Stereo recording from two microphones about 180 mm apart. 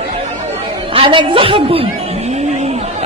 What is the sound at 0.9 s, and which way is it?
Speech, 30° right (ahead or behind).